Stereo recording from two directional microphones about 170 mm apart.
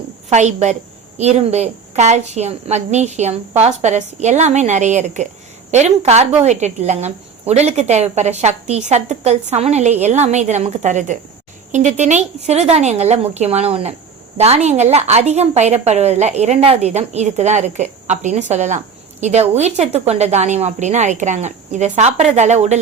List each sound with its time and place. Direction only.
0.3 s a woman's voice: 45° right (ahead or behind)